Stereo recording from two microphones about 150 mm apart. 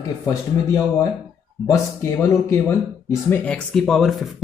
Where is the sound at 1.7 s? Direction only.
20° left (ahead or behind); by 4.3 s centre (ahead or behind).